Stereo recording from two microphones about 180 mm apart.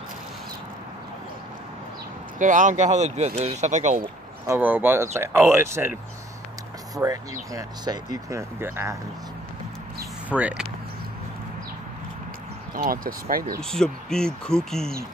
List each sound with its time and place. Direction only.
2.3 s speech: 45° right (ahead or behind)
4.5 s speech: 10° right (ahead or behind)
7.0 s speech: 20° right (ahead or behind)
9.9 s a sound: 10° right (ahead or behind)
12.7 s speech: 50° right (ahead or behind)
13.6 s speech: 5° left (ahead or behind)